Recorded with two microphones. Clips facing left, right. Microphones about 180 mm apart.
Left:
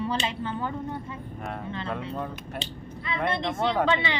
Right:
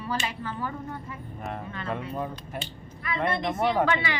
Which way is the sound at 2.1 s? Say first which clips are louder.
Even; 5° right (ahead or behind).